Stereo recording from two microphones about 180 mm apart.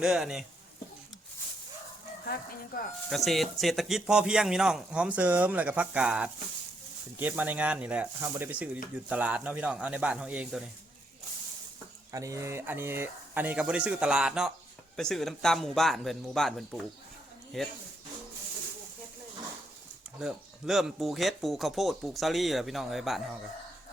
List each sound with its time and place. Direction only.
0.0 s speech: 5° right (ahead or behind)
2.2 s speech: 55° left (ahead or behind)
3.1 s speech: centre (ahead or behind)
12.1 s speech: 15° right (ahead or behind); by 17.7 s centre (ahead or behind)
20.1 s speech: centre (ahead or behind)